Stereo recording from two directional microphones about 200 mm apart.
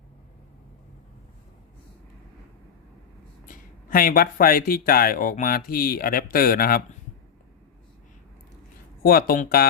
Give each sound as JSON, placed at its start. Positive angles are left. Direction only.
{"t": 3.4, "sound": "speech", "side_deg": 45}
{"t": 9.0, "sound": "speech", "side_deg": 45}